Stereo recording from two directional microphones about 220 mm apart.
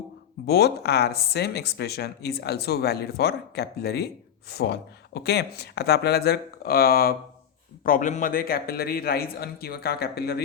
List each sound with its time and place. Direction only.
0.4 s speech: 45° left (ahead or behind)